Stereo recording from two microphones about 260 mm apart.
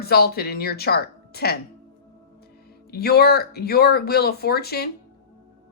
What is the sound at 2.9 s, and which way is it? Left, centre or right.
A woman's voice, left.